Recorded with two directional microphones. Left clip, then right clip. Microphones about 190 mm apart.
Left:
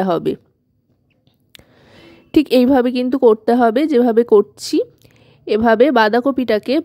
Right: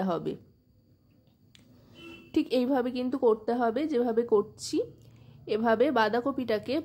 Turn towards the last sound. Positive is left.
turn(degrees=45)  # may be behind; listen again after turning